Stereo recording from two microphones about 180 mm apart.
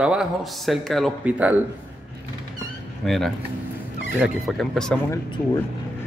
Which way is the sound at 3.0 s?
Centre (ahead or behind).